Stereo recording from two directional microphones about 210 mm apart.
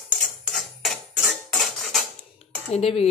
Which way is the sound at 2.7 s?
30° left (ahead or behind).